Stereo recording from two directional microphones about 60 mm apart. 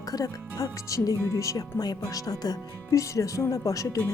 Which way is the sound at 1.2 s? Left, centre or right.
Left.